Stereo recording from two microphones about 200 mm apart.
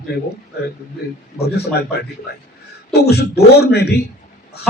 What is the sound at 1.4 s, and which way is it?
Speech, 55° left (ahead or behind).